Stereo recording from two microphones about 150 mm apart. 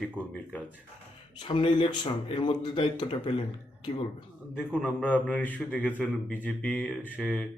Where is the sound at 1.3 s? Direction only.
35° left (ahead or behind).